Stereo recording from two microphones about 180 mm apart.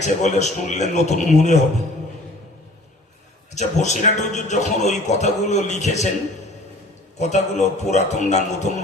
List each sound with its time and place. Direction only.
0.0 s a man's voice: 40° left (ahead or behind)
3.5 s a man's voice: 40° left (ahead or behind)
7.2 s a man's voice: 40° left (ahead or behind)